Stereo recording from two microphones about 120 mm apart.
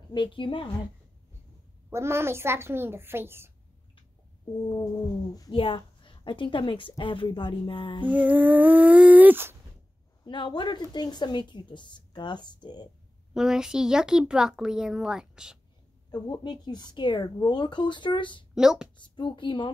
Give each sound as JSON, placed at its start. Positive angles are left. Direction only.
{"t": 0.1, "sound": "a woman's voice", "side_deg": 40}
{"t": 1.9, "sound": "a woman's voice", "side_deg": -20}
{"t": 4.7, "sound": "a woman's voice", "side_deg": 30}
{"t": 5.6, "sound": "a woman's voice", "side_deg": 45}
{"t": 8.1, "sound": "speech", "side_deg": -15}
{"t": 10.2, "sound": "a woman's voice", "side_deg": 40}
{"t": 13.3, "sound": "a child's voice", "side_deg": -5}
{"t": 16.1, "sound": "a woman's voice", "side_deg": 35}
{"t": 18.5, "sound": "speech", "side_deg": -5}
{"t": 18.9, "sound": "a woman's voice", "side_deg": 40}